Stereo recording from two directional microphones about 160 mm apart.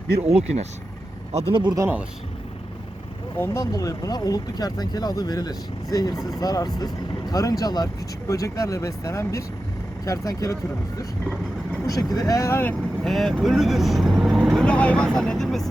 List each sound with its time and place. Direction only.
1.3 s speech: 40° right (ahead or behind)
1.7 s speech: 15° right (ahead or behind)
3.3 s speech: 15° left (ahead or behind)
13.1 s speech: centre (ahead or behind)